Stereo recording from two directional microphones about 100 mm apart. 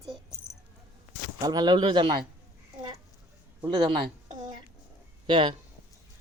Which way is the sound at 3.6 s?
50° right (ahead or behind).